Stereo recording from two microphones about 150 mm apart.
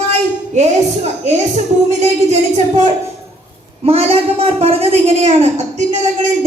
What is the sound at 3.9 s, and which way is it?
A woman's voice, 40° right (ahead or behind).